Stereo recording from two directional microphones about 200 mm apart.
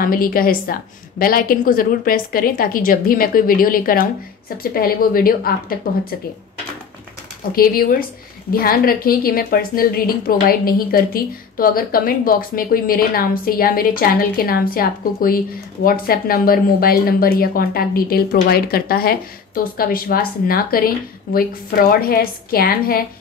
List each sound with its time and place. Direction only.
0.0 s a woman's voice: 45° left (ahead or behind)
7.5 s a woman's voice: 45° left (ahead or behind)